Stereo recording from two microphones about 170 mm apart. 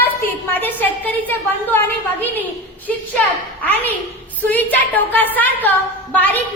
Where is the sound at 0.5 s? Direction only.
10° left (ahead or behind).